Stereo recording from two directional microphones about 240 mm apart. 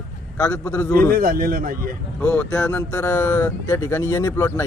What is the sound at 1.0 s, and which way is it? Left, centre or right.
Speech, right.